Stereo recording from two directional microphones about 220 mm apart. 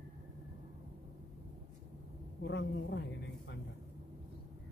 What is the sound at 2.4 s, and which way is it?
Speech, 50° left (ahead or behind).